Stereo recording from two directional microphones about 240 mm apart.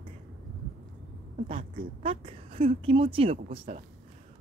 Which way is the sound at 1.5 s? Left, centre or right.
Right.